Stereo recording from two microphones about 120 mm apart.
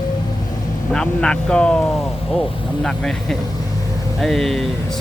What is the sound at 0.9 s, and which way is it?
Speech, 5° left (ahead or behind).